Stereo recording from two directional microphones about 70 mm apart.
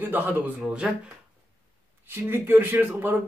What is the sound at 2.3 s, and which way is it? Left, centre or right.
Speech, right.